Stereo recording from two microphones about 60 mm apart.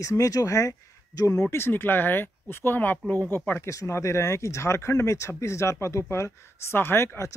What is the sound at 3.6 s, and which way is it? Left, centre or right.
Speech, left.